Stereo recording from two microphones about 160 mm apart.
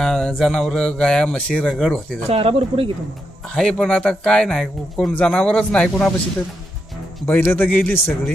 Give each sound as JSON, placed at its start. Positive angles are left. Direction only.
{"t": 0.0, "sound": "speech", "side_deg": 5}
{"t": 2.3, "sound": "speech", "side_deg": -35}
{"t": 3.5, "sound": "speech", "side_deg": 5}
{"t": 7.3, "sound": "a man's voice", "side_deg": 15}